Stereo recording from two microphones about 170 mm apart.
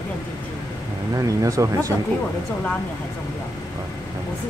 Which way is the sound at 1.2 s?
20° right (ahead or behind).